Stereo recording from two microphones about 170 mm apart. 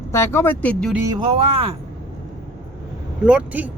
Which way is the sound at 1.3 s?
35° right (ahead or behind).